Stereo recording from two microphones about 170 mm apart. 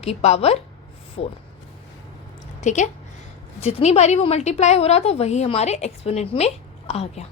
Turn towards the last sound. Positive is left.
turn(degrees=35)  # may be behind; listen again after turning